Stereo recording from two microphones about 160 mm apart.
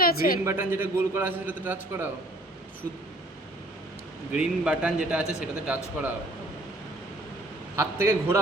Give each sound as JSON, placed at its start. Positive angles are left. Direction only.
{"t": 0.0, "sound": "speech", "side_deg": 65}
{"t": 0.4, "sound": "a man's voice", "side_deg": -15}
{"t": 4.4, "sound": "a man's voice", "side_deg": -5}
{"t": 7.8, "sound": "a man's voice", "side_deg": -15}